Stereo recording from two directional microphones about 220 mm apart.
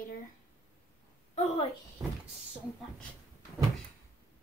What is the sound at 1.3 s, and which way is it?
Speech, 30° left (ahead or behind).